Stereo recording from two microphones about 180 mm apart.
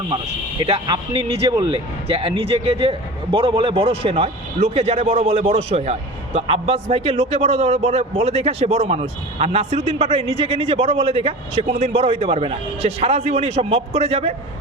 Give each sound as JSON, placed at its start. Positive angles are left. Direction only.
{"t": 0.6, "sound": "a man's voice", "side_deg": -30}